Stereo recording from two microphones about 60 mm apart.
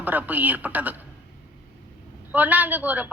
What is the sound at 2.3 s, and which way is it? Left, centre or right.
Speech, right.